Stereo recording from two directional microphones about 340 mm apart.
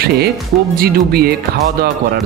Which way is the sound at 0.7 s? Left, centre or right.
Right.